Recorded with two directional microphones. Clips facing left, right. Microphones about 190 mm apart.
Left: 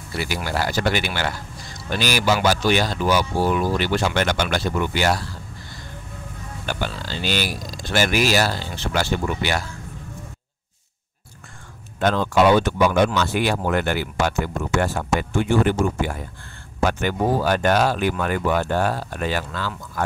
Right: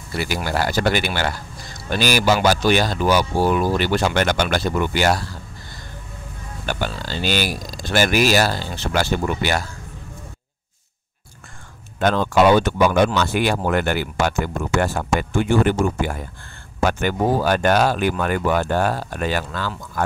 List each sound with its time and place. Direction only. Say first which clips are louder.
0.2 s speech: right 2 dB; 45° right (ahead or behind)
6.6 s speech: right 2 dB; 45° right (ahead or behind)
12.0 s speech: right 1 dB; 50° right (ahead or behind)